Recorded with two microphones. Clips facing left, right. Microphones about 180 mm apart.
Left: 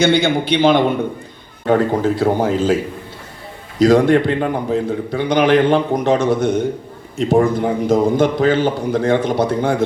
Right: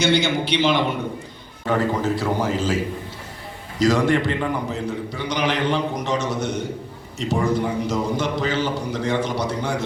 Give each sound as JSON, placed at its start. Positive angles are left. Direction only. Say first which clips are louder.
{"t": 0.0, "sound": "a man's voice", "louder": "left 5 dB", "side_deg": 55}
{"t": 3.8, "sound": "a man's voice", "louder": "left 7 dB", "side_deg": 55}